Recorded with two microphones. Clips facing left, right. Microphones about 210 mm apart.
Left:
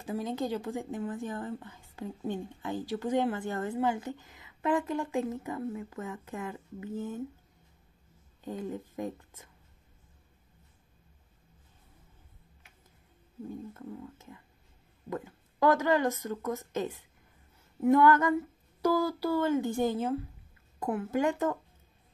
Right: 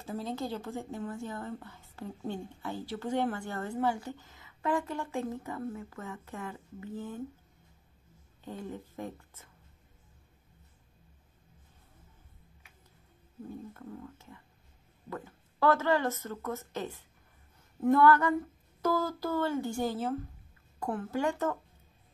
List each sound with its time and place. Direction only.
0.0 s a woman's voice: 15° left (ahead or behind)
8.5 s a woman's voice: 15° left (ahead or behind)
13.7 s a woman's voice: 20° left (ahead or behind)